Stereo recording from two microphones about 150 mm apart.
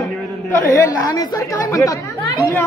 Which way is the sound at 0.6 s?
20° left (ahead or behind).